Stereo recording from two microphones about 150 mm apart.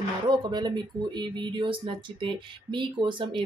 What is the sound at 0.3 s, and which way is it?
Speech, 30° right (ahead or behind).